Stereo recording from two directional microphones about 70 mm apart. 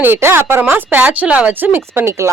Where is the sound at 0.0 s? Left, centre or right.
Right.